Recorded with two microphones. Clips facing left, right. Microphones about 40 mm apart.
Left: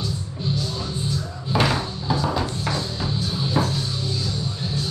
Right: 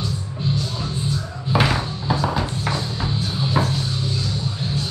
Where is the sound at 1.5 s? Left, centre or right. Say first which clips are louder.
Right 2 dB; centre.